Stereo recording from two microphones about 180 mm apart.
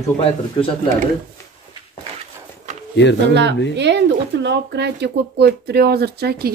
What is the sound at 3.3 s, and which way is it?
A woman's voice, 75° right (ahead or behind).